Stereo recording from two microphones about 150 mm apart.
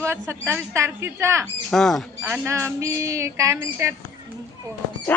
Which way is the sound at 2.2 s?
20° right (ahead or behind).